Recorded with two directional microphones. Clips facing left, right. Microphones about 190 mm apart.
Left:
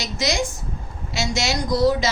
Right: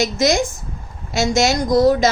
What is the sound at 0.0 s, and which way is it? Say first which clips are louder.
A woman's voice: right 7 dB; 50° right (ahead or behind).